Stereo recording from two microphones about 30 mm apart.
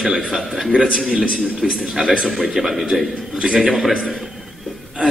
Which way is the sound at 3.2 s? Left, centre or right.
Right.